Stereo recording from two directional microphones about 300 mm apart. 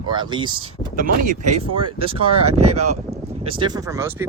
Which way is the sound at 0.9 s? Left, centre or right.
Right.